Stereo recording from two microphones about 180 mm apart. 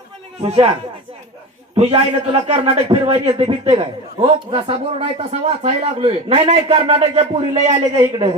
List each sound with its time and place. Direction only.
0.4 s a man's voice: 35° right (ahead or behind)